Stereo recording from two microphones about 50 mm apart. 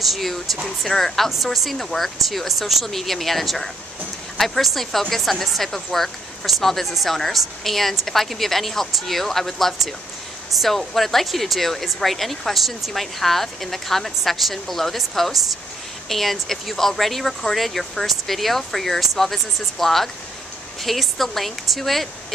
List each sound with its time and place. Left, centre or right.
0.0 s a woman's voice: centre